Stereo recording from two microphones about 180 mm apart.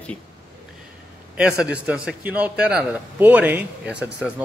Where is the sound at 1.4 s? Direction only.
5° right (ahead or behind).